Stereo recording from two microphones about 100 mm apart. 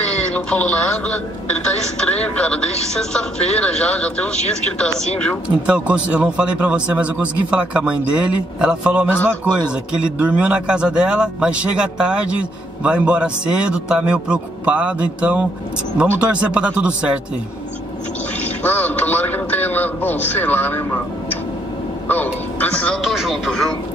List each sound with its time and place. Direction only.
0.3 s a man's voice: 10° left (ahead or behind)
5.7 s a man's voice: 10° right (ahead or behind)
18.6 s a man's voice: 15° left (ahead or behind)
22.0 s a man's voice: 15° left (ahead or behind)
23.0 s speech: centre (ahead or behind)